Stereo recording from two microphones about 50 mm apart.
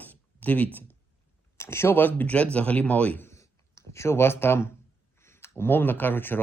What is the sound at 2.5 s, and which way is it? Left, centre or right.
Speech, left.